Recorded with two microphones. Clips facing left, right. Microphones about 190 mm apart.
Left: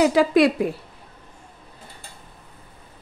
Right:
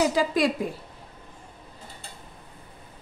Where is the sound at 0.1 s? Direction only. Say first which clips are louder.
Left 7 dB; 65° left (ahead or behind).